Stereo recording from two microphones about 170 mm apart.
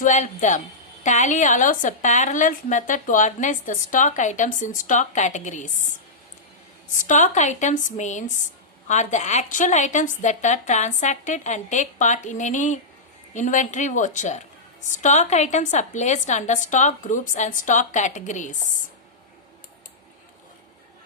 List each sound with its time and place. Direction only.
0.0 s speech: 45° left (ahead or behind)
6.9 s speech: 50° left (ahead or behind)